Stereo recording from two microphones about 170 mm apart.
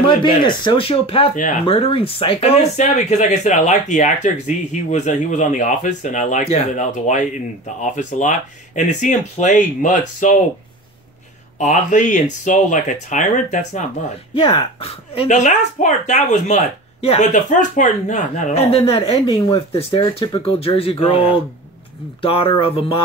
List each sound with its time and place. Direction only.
0.2 s speech: 30° left (ahead or behind); by 10.4 s 50° left (ahead or behind)
11.5 s speech: 45° left (ahead or behind)
14.3 s speech: 30° left (ahead or behind)
22.2 s speech: 30° left (ahead or behind)